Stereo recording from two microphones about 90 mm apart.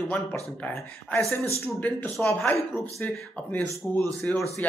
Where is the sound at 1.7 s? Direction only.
20° left (ahead or behind).